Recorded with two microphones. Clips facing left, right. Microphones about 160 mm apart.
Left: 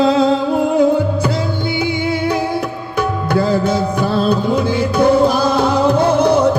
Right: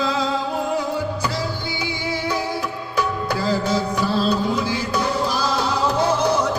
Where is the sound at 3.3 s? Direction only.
55° left (ahead or behind).